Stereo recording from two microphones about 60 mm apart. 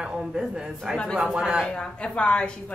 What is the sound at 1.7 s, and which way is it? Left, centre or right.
Speech, centre.